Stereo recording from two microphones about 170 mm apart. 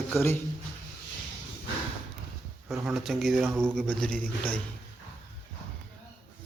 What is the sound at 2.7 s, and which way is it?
Speech, centre (ahead or behind).